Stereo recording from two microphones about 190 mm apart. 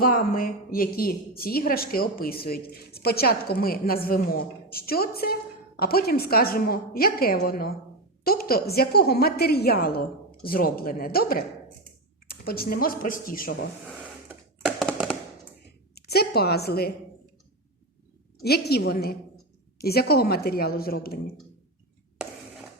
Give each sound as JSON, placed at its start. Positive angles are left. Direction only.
{"t": 0.0, "sound": "a woman's voice", "side_deg": 50}
{"t": 14.3, "sound": "a sound", "side_deg": 0}
{"t": 16.0, "sound": "a woman's voice", "side_deg": 55}
{"t": 18.4, "sound": "a woman's voice", "side_deg": 60}